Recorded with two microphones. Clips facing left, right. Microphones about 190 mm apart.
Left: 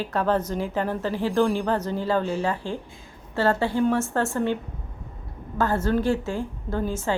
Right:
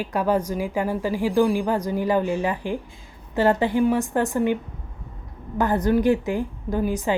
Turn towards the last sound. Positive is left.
turn(degrees=-15)  # may be behind; listen again after turning